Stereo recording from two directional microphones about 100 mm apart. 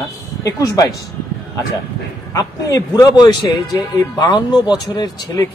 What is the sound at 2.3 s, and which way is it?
Speech, 35° left (ahead or behind).